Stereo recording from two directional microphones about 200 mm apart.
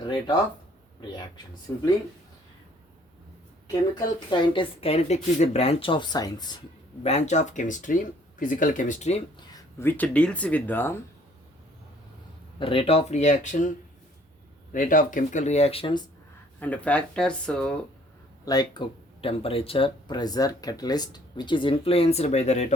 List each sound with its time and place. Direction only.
0.0 s a sound: 25° left (ahead or behind)
1.7 s speech: 15° left (ahead or behind)
3.7 s speech: 20° left (ahead or behind)
7.0 s speech: 30° left (ahead or behind)
9.5 s speech: 15° left (ahead or behind)
12.5 s speech: 25° left (ahead or behind)
16.6 s speech: 5° left (ahead or behind)
18.4 s speech: 20° left (ahead or behind)